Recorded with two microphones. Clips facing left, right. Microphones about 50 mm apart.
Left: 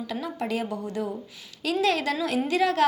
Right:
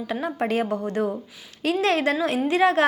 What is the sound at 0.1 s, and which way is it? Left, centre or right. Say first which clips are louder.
A woman's voice: right 6 dB; right.